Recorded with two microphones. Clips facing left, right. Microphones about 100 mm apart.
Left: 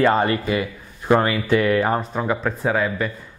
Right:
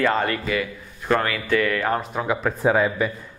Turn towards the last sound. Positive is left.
turn(degrees=-10)  # may be behind; listen again after turning